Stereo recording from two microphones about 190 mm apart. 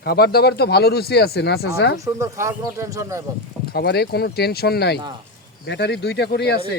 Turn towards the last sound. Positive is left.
turn(degrees=60)  # may be behind; listen again after turning